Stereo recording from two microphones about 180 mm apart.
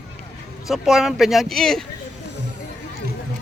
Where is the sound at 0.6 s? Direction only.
Centre (ahead or behind).